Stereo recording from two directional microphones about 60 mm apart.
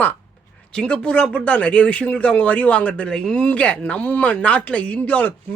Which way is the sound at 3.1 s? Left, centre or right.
Centre.